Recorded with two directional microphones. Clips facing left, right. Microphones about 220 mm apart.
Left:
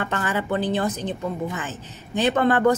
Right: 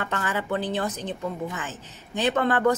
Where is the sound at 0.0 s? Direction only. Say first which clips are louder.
Left 3 dB; 25° left (ahead or behind).